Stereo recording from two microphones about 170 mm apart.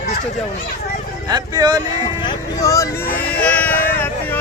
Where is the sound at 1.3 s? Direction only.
20° right (ahead or behind).